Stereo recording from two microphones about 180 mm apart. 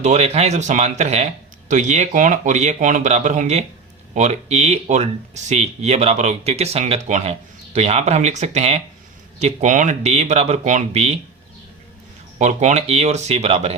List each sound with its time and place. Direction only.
0.0 s speech: 40° right (ahead or behind)
12.4 s speech: 40° right (ahead or behind)